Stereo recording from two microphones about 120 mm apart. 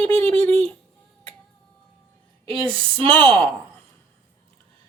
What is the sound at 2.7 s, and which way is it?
Speech, 45° right (ahead or behind).